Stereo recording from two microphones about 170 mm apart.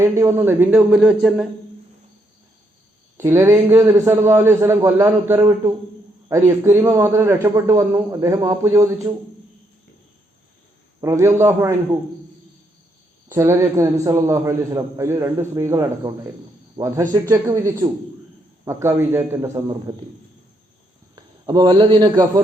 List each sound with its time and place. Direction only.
0.0 s a man's voice: 15° right (ahead or behind)
3.2 s a man's voice: 15° right (ahead or behind)
11.0 s a man's voice: 15° right (ahead or behind)
13.2 s a man's voice: 15° right (ahead or behind)
21.2 s a man's voice: 25° right (ahead or behind)